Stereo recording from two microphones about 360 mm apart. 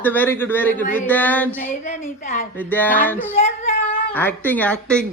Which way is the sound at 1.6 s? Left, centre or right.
Centre.